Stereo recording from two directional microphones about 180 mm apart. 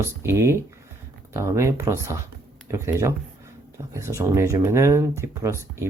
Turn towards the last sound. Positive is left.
turn(degrees=-15)  # may be behind; listen again after turning